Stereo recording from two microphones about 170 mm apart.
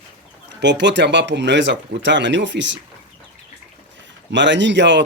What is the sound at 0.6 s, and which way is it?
Chicken, 90° right.